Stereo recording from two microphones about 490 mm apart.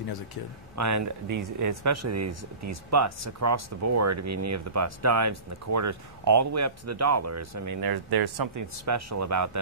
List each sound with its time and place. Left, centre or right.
0.7 s speech: right
8.7 s speech: right